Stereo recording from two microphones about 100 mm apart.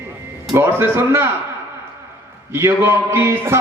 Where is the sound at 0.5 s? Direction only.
25° right (ahead or behind).